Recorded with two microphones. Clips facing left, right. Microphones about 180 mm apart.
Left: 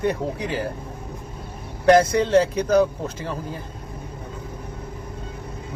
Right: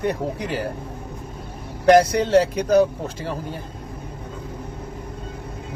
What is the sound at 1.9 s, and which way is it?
Speech, 35° right (ahead or behind).